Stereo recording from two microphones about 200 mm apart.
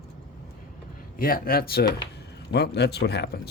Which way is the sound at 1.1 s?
45° left (ahead or behind).